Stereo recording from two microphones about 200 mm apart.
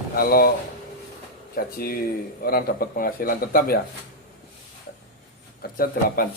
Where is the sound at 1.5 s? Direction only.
50° left (ahead or behind).